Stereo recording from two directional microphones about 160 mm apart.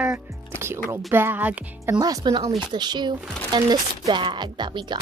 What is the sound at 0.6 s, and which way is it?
Music, 15° right (ahead or behind).